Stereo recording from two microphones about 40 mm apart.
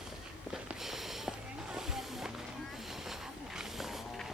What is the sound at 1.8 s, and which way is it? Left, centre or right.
Music, centre.